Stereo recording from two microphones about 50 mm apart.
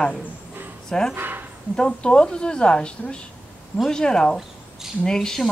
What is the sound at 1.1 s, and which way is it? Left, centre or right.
Speech, right.